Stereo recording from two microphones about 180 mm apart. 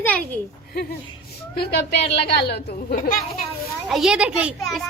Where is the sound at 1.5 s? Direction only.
60° left (ahead or behind).